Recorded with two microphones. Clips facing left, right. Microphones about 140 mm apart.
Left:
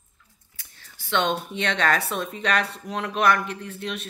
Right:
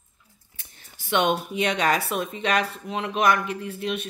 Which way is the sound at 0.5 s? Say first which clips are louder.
Even; 20° right (ahead or behind).